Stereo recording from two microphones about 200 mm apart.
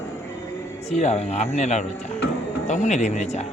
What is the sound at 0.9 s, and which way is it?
Speech, 35° left (ahead or behind).